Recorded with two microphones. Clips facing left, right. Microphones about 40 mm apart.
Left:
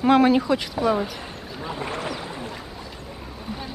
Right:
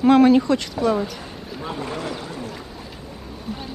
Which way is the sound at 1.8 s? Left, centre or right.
Centre.